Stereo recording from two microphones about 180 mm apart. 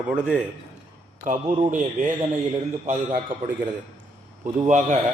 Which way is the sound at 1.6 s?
45° right (ahead or behind).